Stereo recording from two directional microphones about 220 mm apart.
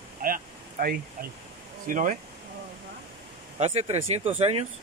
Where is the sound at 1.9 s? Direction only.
35° right (ahead or behind).